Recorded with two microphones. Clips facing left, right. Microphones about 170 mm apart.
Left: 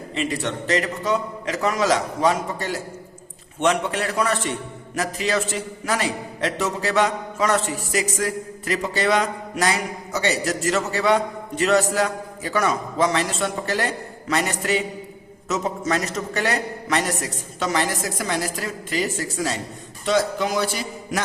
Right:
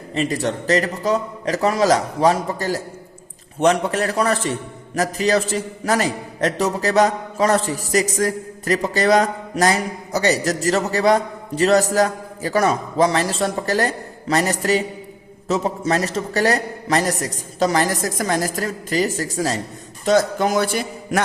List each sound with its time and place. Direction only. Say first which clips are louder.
0.1 s a man's voice: right 4 dB; 40° right (ahead or behind)